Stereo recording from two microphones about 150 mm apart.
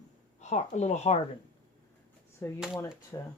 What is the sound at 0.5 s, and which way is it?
Speech, 50° left (ahead or behind).